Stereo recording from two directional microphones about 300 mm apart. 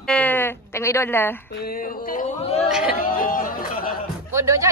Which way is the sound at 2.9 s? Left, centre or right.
Left.